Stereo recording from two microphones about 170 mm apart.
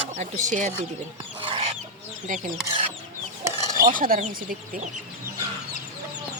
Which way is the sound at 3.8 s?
50° right (ahead or behind).